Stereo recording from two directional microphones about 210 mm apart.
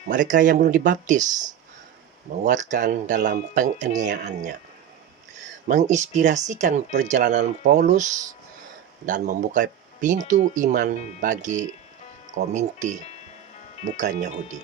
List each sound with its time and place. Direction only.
0.1 s speech: 40° right (ahead or behind)
5.6 s speech: 35° right (ahead or behind)